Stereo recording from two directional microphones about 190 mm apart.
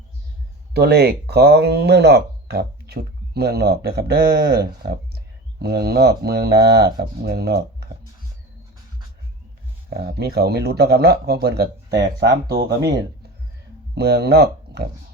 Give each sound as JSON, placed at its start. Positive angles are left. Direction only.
{"t": 0.7, "sound": "speech", "side_deg": -55}
{"t": 9.9, "sound": "speech", "side_deg": -55}
{"t": 11.9, "sound": "speech", "side_deg": -20}
{"t": 12.2, "sound": "speech", "side_deg": -60}
{"t": 13.9, "sound": "speech", "side_deg": -60}